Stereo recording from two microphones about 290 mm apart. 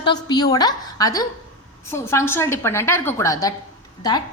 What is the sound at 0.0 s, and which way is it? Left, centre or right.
A woman's voice, centre.